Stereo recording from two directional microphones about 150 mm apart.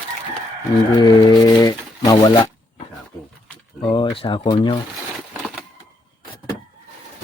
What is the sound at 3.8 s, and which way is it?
Speech, 35° left (ahead or behind).